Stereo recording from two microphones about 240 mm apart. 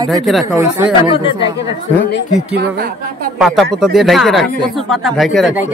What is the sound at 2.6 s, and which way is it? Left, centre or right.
Speech, right.